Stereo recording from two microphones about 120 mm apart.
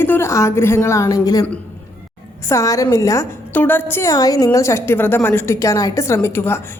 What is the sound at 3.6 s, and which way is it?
A woman's voice, 15° left (ahead or behind).